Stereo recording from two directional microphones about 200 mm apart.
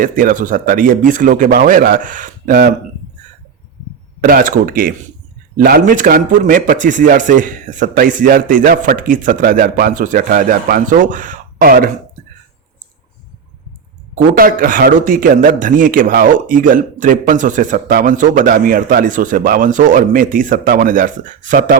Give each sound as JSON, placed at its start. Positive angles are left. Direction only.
{"t": 0.0, "sound": "speech", "side_deg": -45}
{"t": 4.2, "sound": "a man's voice", "side_deg": -45}
{"t": 14.3, "sound": "speech", "side_deg": -45}